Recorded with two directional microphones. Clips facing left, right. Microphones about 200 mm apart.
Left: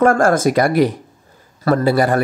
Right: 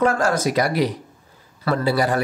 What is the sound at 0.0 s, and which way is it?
Speech, 50° left (ahead or behind).